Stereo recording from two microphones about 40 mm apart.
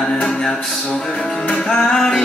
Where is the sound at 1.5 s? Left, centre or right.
Left.